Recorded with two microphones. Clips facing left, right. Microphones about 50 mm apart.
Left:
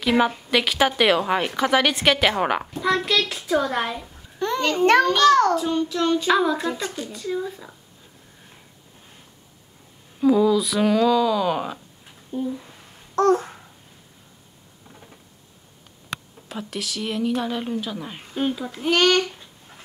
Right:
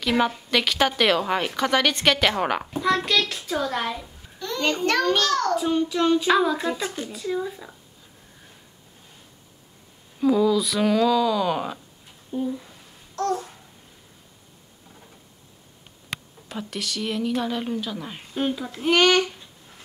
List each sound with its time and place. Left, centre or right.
0.0 s a woman's voice: centre
4.4 s a sound: left
5.1 s a child's voice: left
5.6 s a child's voice: centre
10.2 s a child's voice: centre
13.1 s babbling: left
16.4 s a child's voice: centre